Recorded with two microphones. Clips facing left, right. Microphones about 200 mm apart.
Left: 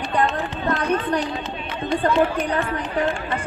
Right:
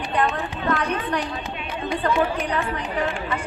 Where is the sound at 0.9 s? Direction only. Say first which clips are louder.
Left 4 dB; 45° left (ahead or behind).